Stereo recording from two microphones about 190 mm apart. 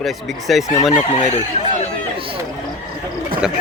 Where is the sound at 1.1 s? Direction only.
35° left (ahead or behind).